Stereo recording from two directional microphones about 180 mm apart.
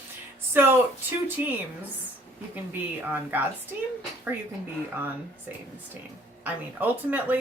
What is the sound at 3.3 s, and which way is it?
Speech, 10° right (ahead or behind).